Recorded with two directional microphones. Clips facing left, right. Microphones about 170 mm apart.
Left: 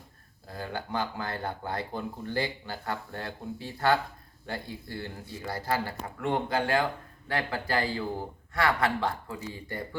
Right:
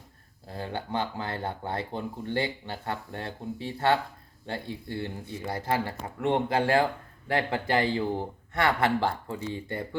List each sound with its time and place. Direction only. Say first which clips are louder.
0.4 s speech: right 2 dB; 30° right (ahead or behind)